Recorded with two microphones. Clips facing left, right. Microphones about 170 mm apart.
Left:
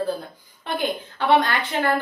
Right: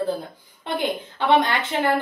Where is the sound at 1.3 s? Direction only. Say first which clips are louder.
Even; 25° right (ahead or behind).